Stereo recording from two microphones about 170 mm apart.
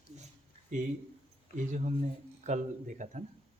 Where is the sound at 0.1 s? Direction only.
40° right (ahead or behind).